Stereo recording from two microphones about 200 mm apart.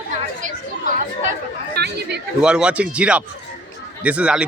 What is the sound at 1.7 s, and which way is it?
Speech, 55° right (ahead or behind).